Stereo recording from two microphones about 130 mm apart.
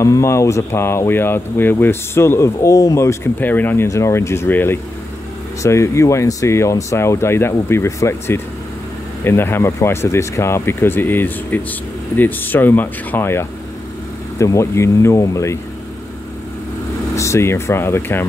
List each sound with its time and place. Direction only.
0.0 s speech: 20° left (ahead or behind)
17.1 s speech: 20° left (ahead or behind)